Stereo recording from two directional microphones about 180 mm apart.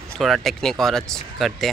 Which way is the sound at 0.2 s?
Centre (ahead or behind).